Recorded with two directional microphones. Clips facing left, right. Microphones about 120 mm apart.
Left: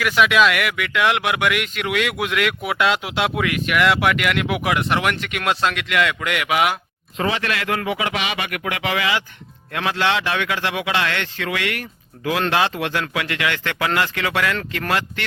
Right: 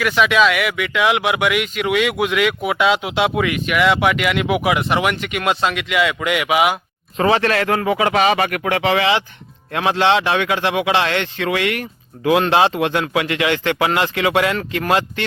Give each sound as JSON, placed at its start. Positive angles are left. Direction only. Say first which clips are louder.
{"t": 0.0, "sound": "speech", "louder": "right 1 dB", "side_deg": 0}
{"t": 7.2, "sound": "speech", "louder": "right 7 dB", "side_deg": -40}